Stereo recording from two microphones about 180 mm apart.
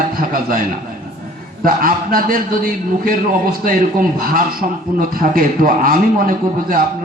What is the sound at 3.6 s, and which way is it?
A man's voice, 50° right (ahead or behind).